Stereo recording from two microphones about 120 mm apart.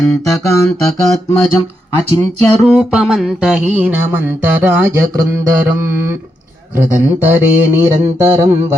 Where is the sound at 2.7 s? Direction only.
5° right (ahead or behind).